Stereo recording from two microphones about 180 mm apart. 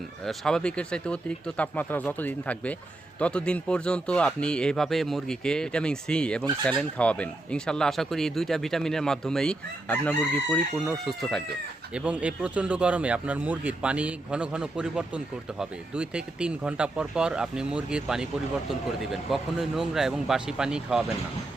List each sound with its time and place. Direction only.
0.3 s speech: 5° left (ahead or behind)
19.3 s speech: centre (ahead or behind)